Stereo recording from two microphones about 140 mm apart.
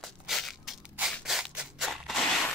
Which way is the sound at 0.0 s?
Centre (ahead or behind).